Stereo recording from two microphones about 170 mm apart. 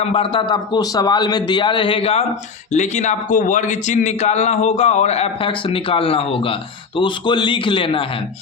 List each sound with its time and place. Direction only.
0.0 s a man's voice: 35° left (ahead or behind)